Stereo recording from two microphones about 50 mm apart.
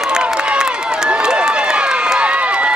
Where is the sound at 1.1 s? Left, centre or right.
Centre.